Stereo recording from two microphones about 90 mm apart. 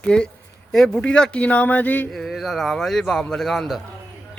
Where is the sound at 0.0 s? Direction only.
10° left (ahead or behind).